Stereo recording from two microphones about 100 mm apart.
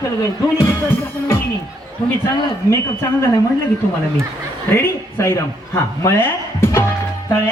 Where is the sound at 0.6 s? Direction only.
25° left (ahead or behind).